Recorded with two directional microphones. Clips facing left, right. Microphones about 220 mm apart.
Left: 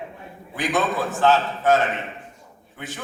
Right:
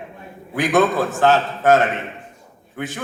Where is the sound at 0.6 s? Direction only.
45° right (ahead or behind).